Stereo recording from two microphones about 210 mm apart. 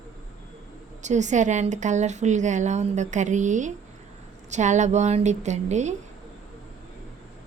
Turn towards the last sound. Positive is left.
turn(degrees=-35)  # may be behind; listen again after turning